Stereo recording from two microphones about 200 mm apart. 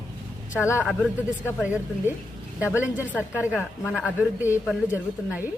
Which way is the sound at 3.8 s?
15° left (ahead or behind).